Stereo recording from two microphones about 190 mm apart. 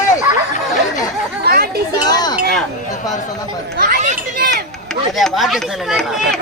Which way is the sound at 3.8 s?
45° right (ahead or behind).